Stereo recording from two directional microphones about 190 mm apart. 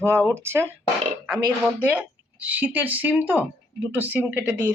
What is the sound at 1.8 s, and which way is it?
Speech, 10° right (ahead or behind).